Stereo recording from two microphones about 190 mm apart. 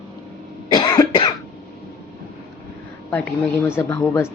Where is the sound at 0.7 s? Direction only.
20° left (ahead or behind).